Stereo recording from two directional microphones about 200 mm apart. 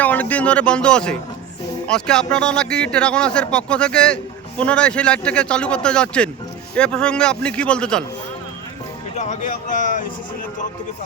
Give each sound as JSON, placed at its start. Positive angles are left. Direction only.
{"t": 0.0, "sound": "a man's voice", "side_deg": 10}
{"t": 9.1, "sound": "speech", "side_deg": 35}